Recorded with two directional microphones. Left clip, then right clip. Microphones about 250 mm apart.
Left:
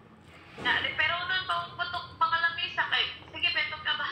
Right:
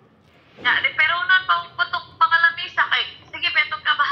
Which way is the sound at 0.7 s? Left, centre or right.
Right.